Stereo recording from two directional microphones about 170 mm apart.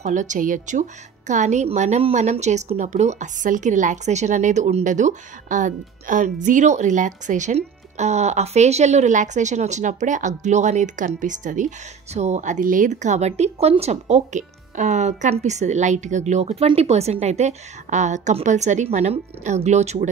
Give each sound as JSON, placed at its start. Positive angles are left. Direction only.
{"t": 0.0, "sound": "speech", "side_deg": -45}